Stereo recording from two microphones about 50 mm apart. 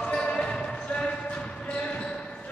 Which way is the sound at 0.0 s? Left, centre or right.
Centre.